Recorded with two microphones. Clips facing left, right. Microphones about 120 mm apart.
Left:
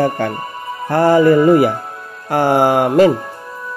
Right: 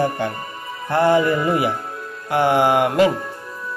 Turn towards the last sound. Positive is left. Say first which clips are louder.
# left 4 dB
turn(degrees=40)  # may be behind; listen again after turning